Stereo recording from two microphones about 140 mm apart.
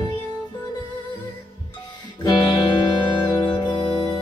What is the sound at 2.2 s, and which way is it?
Music, 30° left (ahead or behind).